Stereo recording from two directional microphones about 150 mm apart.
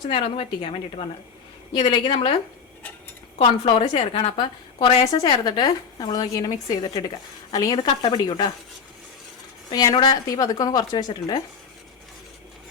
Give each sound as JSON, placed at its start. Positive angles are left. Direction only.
{"t": 0.1, "sound": "a woman's voice", "side_deg": 40}
{"t": 3.3, "sound": "a woman's voice", "side_deg": 40}
{"t": 5.0, "sound": "a woman's voice", "side_deg": 25}
{"t": 9.7, "sound": "a woman's voice", "side_deg": 25}